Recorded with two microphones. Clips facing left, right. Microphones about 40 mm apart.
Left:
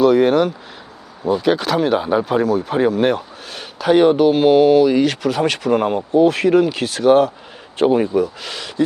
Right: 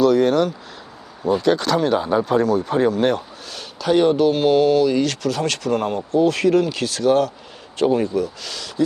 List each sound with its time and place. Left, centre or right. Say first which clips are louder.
0.0 s speech: left 3 dB; centre
1.2 s speech: left 1 dB; centre
3.5 s speech: left 3 dB; left